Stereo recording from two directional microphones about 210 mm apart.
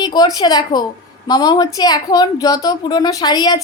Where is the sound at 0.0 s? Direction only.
20° left (ahead or behind).